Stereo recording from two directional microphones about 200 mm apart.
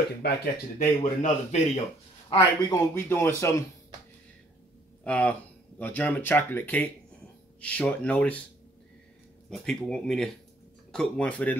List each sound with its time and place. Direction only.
0.2 s speech: 55° left (ahead or behind)
0.7 s speech: 35° left (ahead or behind)
2.2 s a man's voice: 20° left (ahead or behind)
5.0 s a man's voice: 5° left (ahead or behind)
9.5 s speech: 5° left (ahead or behind)